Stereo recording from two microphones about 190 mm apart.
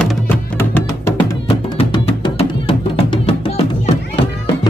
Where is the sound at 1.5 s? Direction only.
30° left (ahead or behind).